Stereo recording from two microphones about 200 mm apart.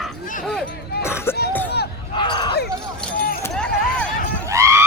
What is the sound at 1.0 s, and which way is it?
Music, 10° left (ahead or behind).